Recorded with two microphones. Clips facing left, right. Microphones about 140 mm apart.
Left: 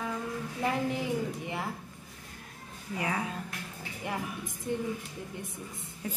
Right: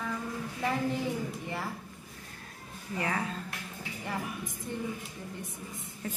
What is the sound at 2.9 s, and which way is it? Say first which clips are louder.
A woman's voice: even; 10° left (ahead or behind).